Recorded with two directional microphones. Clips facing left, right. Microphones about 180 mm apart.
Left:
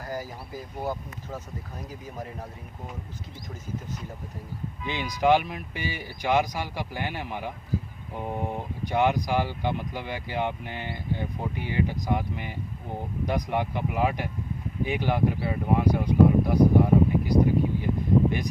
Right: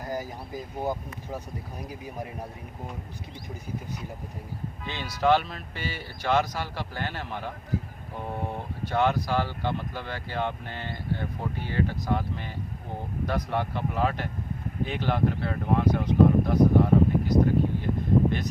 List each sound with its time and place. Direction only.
0.0 s speech: 15° right (ahead or behind)
4.9 s speech: 15° left (ahead or behind)